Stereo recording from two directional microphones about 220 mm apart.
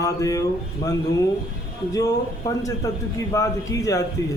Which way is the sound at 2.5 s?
15° left (ahead or behind).